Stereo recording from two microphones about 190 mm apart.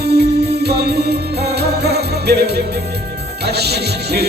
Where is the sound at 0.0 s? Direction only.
60° right (ahead or behind).